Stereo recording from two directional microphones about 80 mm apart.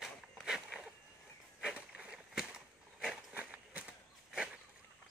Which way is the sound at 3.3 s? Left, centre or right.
Centre.